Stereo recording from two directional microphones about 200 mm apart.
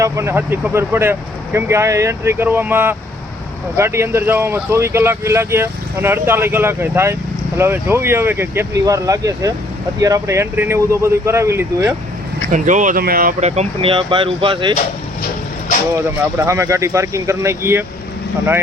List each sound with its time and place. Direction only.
0.0 s speech: 15° right (ahead or behind)
12.5 s speech: 40° right (ahead or behind); by 14.8 s 25° right (ahead or behind)
16.0 s speech: 15° right (ahead or behind)